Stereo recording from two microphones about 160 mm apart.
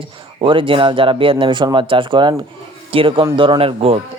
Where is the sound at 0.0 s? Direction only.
35° right (ahead or behind).